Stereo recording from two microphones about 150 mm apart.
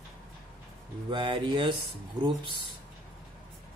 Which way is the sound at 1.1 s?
30° right (ahead or behind).